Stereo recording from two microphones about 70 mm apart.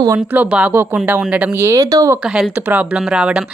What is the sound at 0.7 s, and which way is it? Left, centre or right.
Speech, right.